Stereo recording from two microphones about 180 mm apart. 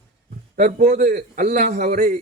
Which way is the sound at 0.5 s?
45° right (ahead or behind).